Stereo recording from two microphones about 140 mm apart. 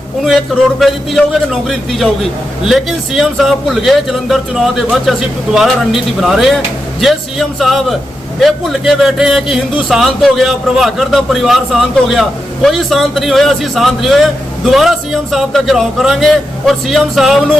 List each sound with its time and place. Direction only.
0.8 s a man's voice: centre (ahead or behind)